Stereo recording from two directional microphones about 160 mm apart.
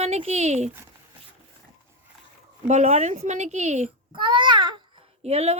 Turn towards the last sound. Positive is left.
turn(degrees=-40)  # may be behind; listen again after turning